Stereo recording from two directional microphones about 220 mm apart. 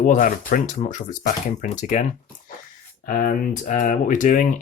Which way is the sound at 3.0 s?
40° left (ahead or behind).